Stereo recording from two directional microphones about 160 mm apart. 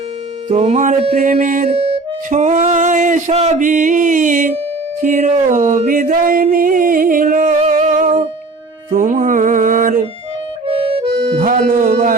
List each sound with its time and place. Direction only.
0.4 s music: 45° right (ahead or behind)
1.7 s music: 35° right (ahead or behind); by 10.1 s 55° right (ahead or behind)
10.7 s music: 35° right (ahead or behind)
11.3 s music: 60° right (ahead or behind)